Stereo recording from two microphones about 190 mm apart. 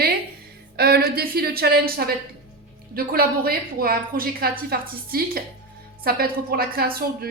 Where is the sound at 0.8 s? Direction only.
55° right (ahead or behind).